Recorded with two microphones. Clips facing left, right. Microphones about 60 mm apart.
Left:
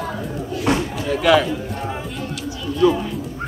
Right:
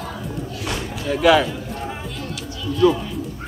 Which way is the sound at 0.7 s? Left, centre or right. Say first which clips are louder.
Left 10 dB; left.